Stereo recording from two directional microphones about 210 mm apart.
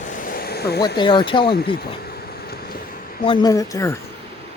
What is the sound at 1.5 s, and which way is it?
Speech, 50° left (ahead or behind).